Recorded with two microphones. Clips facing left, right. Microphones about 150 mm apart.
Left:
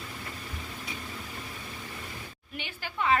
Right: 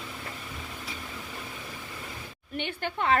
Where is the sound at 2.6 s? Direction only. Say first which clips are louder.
Right 3 dB; 55° right (ahead or behind).